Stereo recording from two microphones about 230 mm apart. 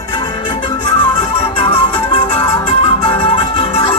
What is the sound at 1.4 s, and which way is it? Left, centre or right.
Music, left.